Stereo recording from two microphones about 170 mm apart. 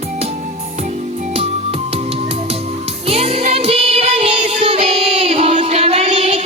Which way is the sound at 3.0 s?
35° right (ahead or behind).